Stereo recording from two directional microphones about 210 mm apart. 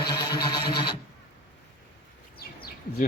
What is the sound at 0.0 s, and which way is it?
Music, 20° left (ahead or behind).